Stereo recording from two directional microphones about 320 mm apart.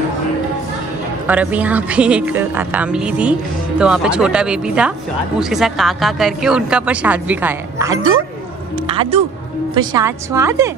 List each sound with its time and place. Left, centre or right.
1.2 s a woman's voice: centre